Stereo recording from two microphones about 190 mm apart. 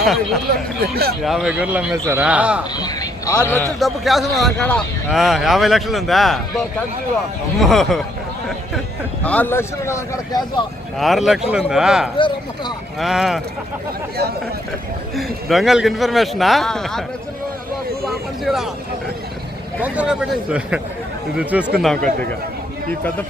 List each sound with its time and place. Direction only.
0.5 s speech: 55° right (ahead or behind)
1.2 s a man's voice: centre (ahead or behind)
2.7 s a sound: 20° left (ahead or behind)
3.4 s speech: 15° left (ahead or behind)
3.8 s a man's voice: centre (ahead or behind)
9.2 s speech: 10° left (ahead or behind)
10.9 s a man's voice: centre (ahead or behind)
12.1 s speech: 25° left (ahead or behind)
13.0 s a man's voice: centre (ahead or behind)
15.1 s a man's voice: centre (ahead or behind)
18.0 s speech: centre (ahead or behind)
19.8 s a man's voice: 5° right (ahead or behind)